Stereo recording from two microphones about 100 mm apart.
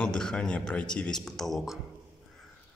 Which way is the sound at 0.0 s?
5° left (ahead or behind).